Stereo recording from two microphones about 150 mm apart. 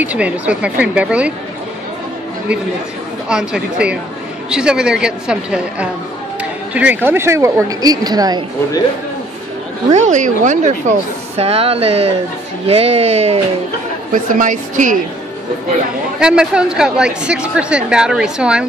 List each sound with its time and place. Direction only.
0.0 s a woman's voice: 10° right (ahead or behind)
3.3 s a woman's voice: 5° right (ahead or behind); by 8.5 s 25° right (ahead or behind)
9.8 s speech: 55° right (ahead or behind)
14.3 s a woman's voice: 60° right (ahead or behind)
16.2 s a woman's voice: 5° right (ahead or behind)